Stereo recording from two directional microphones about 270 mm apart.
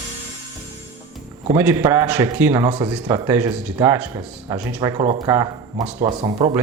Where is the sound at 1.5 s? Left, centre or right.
Centre.